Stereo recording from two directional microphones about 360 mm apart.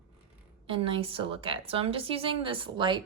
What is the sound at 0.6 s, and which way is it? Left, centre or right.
A woman's voice, centre.